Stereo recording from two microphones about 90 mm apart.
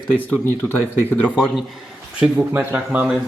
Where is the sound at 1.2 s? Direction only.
15° right (ahead or behind).